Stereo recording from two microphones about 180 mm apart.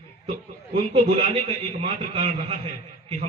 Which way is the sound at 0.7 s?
40° right (ahead or behind).